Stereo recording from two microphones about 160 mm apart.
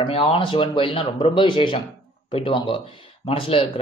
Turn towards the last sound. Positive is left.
turn(degrees=35)  # may be behind; listen again after turning